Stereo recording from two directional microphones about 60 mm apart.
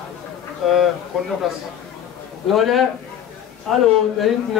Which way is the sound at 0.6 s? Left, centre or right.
Centre.